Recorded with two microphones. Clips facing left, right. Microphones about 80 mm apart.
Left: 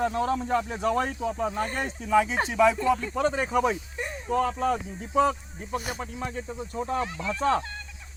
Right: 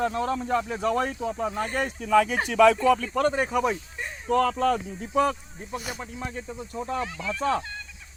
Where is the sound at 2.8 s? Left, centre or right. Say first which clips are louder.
Right 3 dB; left.